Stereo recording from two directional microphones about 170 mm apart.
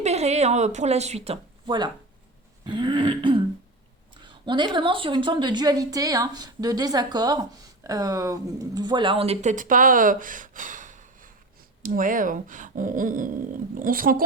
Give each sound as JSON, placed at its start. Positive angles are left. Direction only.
{"t": 0.0, "sound": "a woman's voice", "side_deg": -40}